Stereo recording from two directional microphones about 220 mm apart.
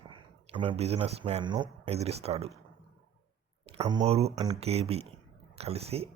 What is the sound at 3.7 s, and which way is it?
Speech, 20° right (ahead or behind).